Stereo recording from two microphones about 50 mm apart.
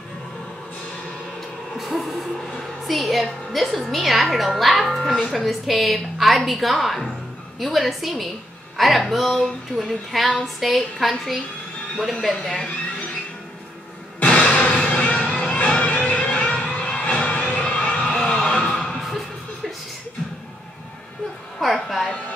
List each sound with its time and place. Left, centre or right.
1.8 s a woman's voice: centre
14.2 s music: left
18.9 s music: centre
21.5 s music: centre